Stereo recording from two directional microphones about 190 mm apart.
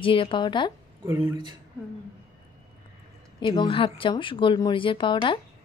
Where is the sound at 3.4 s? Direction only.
25° left (ahead or behind).